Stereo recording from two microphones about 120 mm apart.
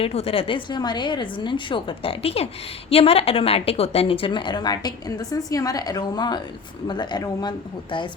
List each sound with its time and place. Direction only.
0.0 s a woman's voice: 55° left (ahead or behind)